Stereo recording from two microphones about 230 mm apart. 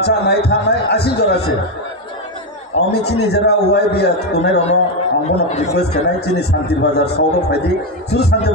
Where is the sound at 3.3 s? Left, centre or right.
Left.